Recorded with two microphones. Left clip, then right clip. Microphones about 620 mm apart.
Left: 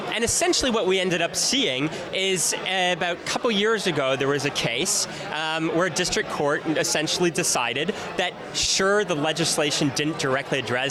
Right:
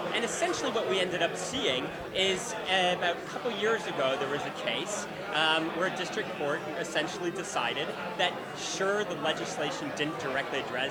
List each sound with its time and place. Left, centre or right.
0.2 s speech: left